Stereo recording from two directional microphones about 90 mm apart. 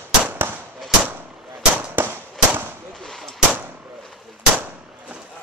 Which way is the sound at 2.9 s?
5° left (ahead or behind).